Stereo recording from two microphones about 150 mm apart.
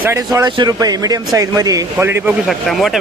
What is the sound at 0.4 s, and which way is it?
Speech, 30° right (ahead or behind).